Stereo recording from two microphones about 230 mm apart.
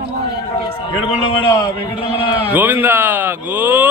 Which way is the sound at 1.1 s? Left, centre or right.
Left.